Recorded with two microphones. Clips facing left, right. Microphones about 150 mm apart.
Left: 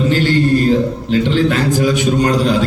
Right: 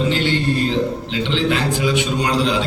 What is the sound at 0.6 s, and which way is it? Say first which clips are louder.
A man's voice: left 5 dB; 45° left (ahead or behind).